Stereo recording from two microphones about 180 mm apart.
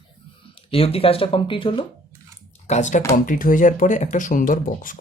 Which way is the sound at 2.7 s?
40° left (ahead or behind).